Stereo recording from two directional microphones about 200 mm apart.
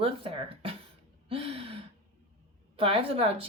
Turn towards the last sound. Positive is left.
turn(degrees=-30)  # may be behind; listen again after turning